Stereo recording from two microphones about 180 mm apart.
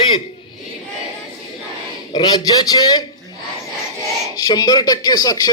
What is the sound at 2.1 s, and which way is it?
Speech, 20° left (ahead or behind).